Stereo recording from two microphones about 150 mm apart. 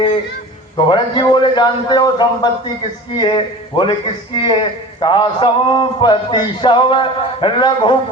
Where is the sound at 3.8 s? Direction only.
30° left (ahead or behind).